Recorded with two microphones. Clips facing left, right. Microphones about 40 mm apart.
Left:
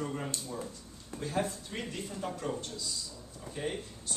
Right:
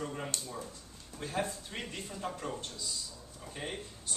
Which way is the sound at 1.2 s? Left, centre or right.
Centre.